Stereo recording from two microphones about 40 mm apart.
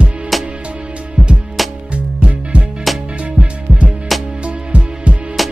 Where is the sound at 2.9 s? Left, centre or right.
Centre.